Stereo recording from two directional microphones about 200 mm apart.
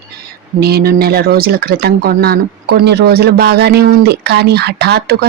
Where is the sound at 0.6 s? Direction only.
50° right (ahead or behind).